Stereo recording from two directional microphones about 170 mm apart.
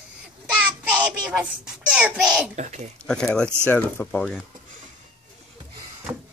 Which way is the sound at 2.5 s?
45° right (ahead or behind).